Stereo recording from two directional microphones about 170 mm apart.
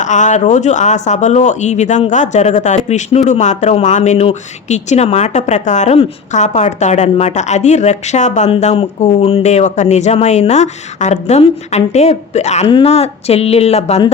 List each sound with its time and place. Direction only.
0.0 s speech: 45° left (ahead or behind)